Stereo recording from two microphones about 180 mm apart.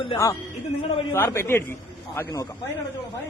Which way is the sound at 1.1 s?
15° left (ahead or behind).